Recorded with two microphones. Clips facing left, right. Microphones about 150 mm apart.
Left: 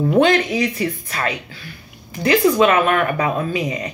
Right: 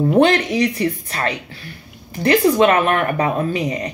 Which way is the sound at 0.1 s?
35° right (ahead or behind).